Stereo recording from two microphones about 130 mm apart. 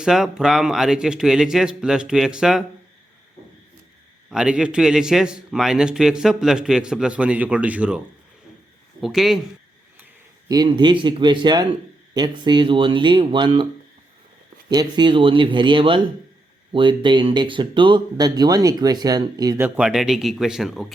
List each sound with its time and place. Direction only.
0.0 s a man's voice: 5° right (ahead or behind)
4.3 s a man's voice: 5° right (ahead or behind)
10.5 s speech: 35° right (ahead or behind)
14.7 s speech: 35° right (ahead or behind)
19.6 s a man's voice: 10° right (ahead or behind)